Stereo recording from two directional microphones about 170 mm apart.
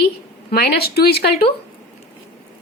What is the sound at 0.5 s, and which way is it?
Speech, 70° left (ahead or behind).